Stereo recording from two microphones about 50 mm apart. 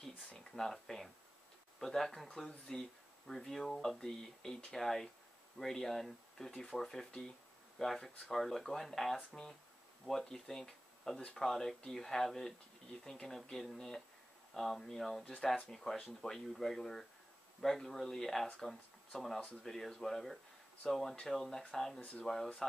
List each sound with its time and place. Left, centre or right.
0.4 s speech: centre